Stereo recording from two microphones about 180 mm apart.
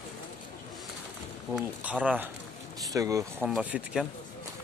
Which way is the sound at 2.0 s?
10° right (ahead or behind).